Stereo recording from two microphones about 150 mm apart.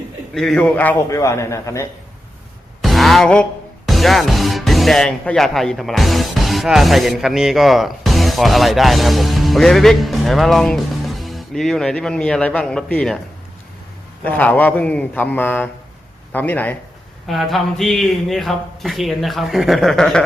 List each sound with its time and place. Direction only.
0.3 s a man's voice: 5° left (ahead or behind); by 1.9 s 20° left (ahead or behind)
2.8 s a sound: centre (ahead or behind)
3.8 s speech: centre (ahead or behind)
14.3 s a man's voice: 10° left (ahead or behind)
17.2 s speech: centre (ahead or behind)